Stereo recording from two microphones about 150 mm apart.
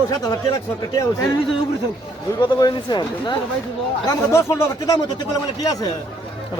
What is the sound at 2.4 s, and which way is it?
Speech, 30° left (ahead or behind).